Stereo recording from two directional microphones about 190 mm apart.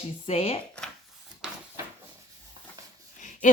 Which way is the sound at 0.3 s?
30° left (ahead or behind).